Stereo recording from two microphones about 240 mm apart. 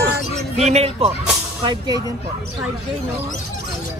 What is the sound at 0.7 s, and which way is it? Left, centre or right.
Speech, right.